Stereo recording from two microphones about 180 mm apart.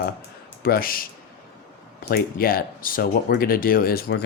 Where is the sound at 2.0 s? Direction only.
55° left (ahead or behind).